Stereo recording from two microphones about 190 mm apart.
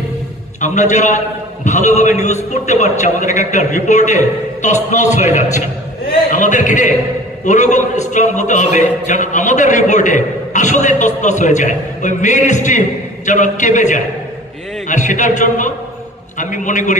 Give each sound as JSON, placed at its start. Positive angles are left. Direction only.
{"t": 0.6, "sound": "a man's voice", "side_deg": 40}